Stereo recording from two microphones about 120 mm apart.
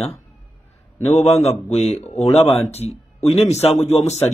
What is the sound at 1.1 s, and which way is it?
A man's voice, 65° left (ahead or behind).